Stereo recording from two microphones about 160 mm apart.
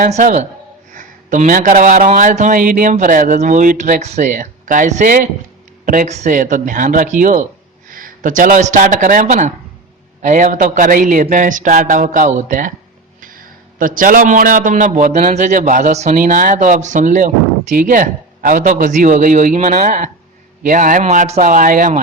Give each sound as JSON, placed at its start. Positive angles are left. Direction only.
{"t": 0.0, "sound": "a man's voice", "side_deg": -50}